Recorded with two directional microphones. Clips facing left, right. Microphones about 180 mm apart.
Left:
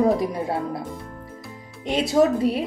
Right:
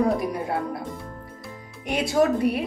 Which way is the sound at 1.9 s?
25° left (ahead or behind).